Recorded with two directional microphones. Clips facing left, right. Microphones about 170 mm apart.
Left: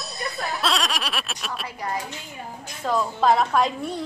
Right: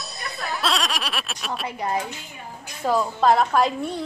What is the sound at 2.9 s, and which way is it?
A woman's voice, 5° right (ahead or behind).